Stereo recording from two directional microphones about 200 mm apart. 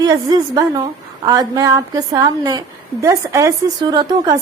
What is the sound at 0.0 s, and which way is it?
A woman's voice, 20° right (ahead or behind).